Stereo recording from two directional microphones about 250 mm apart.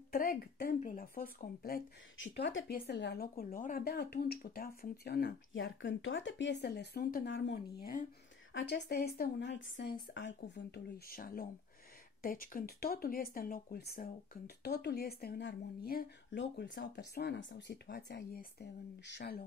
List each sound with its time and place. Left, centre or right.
0.1 s speech: left